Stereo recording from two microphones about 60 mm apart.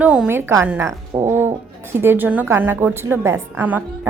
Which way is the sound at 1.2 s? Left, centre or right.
Right.